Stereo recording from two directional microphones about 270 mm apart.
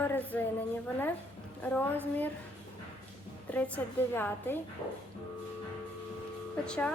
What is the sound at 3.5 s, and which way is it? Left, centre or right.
A woman's voice, centre.